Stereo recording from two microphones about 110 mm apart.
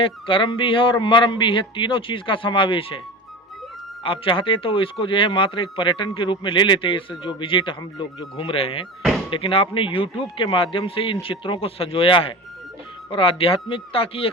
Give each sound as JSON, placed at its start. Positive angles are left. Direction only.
{"t": 0.0, "sound": "speech", "side_deg": 55}
{"t": 4.0, "sound": "speech", "side_deg": 55}
{"t": 8.4, "sound": "speech", "side_deg": 60}